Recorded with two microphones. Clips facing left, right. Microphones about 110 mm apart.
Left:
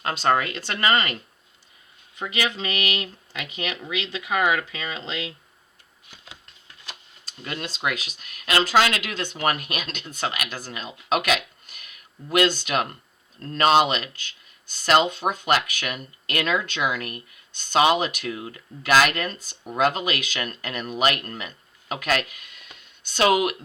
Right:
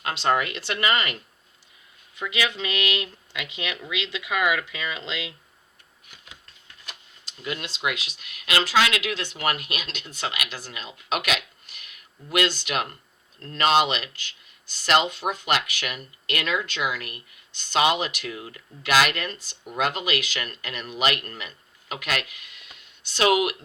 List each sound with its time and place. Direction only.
0.0 s speech: 40° left (ahead or behind)
2.1 s speech: 40° left (ahead or behind)
6.8 s speech: 40° left (ahead or behind)